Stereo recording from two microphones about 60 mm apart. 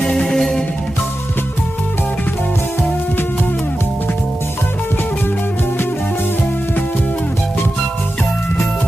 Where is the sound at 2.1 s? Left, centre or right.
Left.